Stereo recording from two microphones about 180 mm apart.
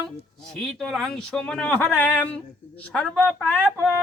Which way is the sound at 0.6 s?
Centre (ahead or behind).